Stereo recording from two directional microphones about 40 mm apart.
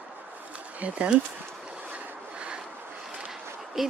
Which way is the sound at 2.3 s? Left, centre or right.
Right.